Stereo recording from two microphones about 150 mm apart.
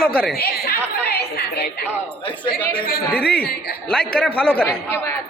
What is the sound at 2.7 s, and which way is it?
A man's voice, 90° left.